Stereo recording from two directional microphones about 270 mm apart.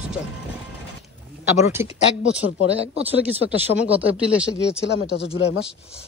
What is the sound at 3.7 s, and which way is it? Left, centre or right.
Speech, left.